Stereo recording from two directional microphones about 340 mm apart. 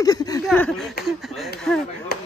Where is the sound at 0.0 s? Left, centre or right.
Centre.